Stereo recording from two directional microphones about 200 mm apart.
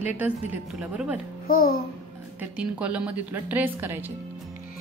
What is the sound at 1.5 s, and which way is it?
Speech, 45° left (ahead or behind).